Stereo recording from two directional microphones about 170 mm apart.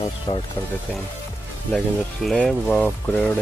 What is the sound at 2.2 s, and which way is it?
Speech, centre (ahead or behind).